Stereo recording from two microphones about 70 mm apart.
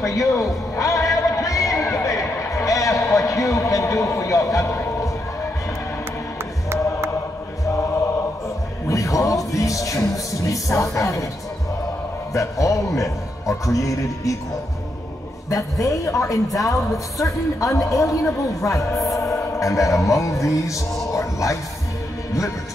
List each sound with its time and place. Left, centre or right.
0.0 s music: left
8.8 s speech: left
12.4 s a man's voice: left
15.5 s a man's voice: left